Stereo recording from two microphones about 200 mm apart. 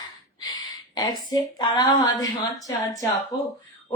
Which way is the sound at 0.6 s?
20° left (ahead or behind).